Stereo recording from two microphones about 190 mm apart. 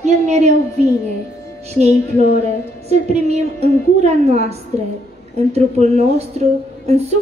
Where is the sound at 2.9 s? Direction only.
35° right (ahead or behind).